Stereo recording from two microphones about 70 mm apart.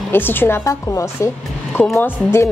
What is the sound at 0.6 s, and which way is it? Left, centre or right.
Speech, left.